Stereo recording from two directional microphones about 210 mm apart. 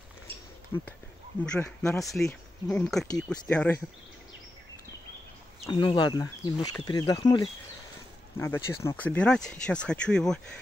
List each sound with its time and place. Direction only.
0.7 s speech: 10° left (ahead or behind)
5.7 s speech: 20° left (ahead or behind); by 10.4 s 5° left (ahead or behind)